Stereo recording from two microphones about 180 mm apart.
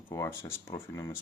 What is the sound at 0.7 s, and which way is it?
Speech, 15° left (ahead or behind).